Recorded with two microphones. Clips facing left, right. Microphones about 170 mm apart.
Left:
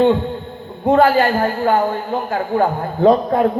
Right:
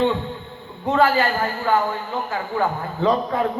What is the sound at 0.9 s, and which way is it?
A man's voice, 55° left (ahead or behind).